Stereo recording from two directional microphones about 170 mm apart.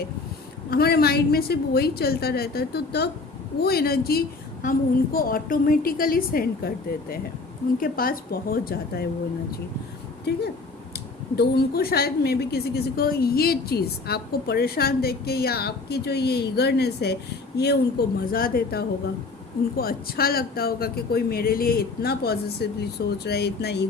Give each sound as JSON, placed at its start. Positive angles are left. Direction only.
{"t": 0.7, "sound": "a woman's voice", "side_deg": 65}
{"t": 10.3, "sound": "a woman's voice", "side_deg": 75}
{"t": 18.3, "sound": "speech", "side_deg": 60}